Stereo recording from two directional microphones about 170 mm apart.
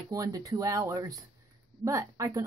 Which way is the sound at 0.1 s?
20° right (ahead or behind).